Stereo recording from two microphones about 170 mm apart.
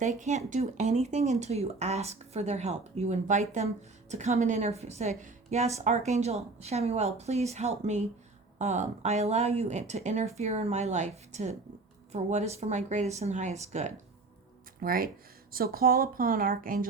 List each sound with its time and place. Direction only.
0.0 s a woman's voice: 45° right (ahead or behind)
14.8 s a woman's voice: 60° right (ahead or behind)